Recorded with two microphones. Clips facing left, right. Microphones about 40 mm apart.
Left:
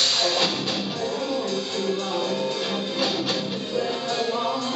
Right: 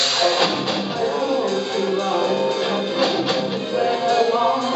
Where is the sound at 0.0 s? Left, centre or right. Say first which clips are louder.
Right 4 dB; centre.